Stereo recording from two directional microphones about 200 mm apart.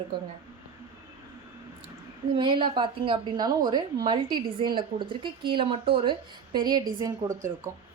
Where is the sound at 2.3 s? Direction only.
25° right (ahead or behind).